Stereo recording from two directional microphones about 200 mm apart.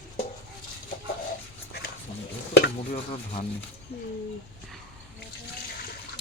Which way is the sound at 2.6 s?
45° left (ahead or behind).